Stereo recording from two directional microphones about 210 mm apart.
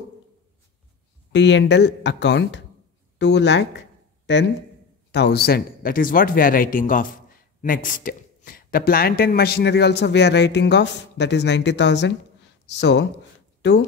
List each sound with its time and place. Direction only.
1.3 s speech: 55° left (ahead or behind)
5.1 s speech: 50° left (ahead or behind)